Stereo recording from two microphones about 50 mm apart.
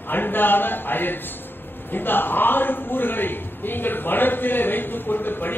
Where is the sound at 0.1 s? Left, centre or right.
Left.